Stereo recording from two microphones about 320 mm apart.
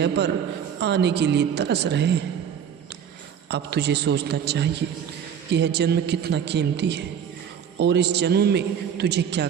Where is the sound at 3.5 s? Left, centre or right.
Right.